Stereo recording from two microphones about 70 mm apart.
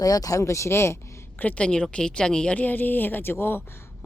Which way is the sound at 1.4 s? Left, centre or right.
Centre.